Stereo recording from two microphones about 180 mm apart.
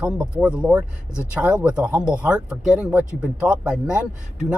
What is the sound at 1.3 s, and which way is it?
Speech, 5° right (ahead or behind).